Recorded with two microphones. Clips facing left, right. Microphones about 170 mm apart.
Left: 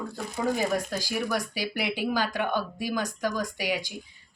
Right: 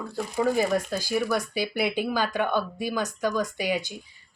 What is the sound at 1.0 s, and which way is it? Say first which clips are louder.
A woman's voice: right 3 dB; 15° left (ahead or behind).